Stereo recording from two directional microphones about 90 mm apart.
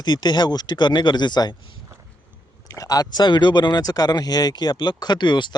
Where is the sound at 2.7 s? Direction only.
45° left (ahead or behind).